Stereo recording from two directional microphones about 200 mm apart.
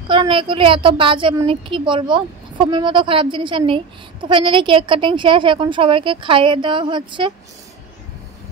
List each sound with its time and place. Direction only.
0.1 s a woman's voice: 25° right (ahead or behind)